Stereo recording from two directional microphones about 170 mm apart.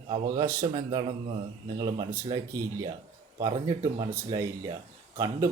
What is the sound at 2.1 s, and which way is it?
Speech, 15° right (ahead or behind).